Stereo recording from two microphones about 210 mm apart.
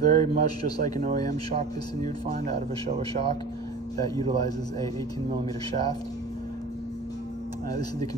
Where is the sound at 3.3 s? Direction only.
20° left (ahead or behind).